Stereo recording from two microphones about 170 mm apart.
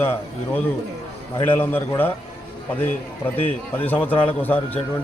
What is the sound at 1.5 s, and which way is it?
Speech, 10° left (ahead or behind).